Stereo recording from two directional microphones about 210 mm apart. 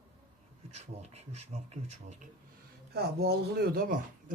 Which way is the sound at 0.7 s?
30° right (ahead or behind).